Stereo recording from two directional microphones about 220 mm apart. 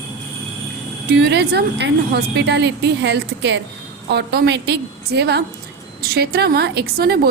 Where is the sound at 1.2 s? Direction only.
50° right (ahead or behind).